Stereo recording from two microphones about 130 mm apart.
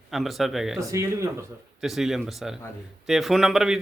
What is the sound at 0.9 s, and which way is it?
Speech, 20° right (ahead or behind).